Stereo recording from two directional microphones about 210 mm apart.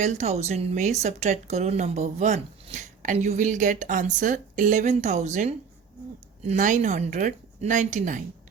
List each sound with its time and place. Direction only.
0.0 s speech: 35° right (ahead or behind)